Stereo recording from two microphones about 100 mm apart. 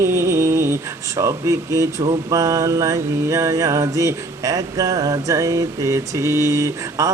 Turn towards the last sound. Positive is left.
turn(degrees=-35)  # may be behind; listen again after turning